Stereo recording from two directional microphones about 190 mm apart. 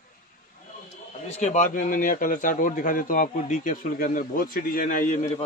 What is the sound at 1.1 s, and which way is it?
Speech, 40° left (ahead or behind).